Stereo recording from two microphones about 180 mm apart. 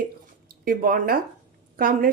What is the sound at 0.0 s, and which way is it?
Drip, 50° right (ahead or behind).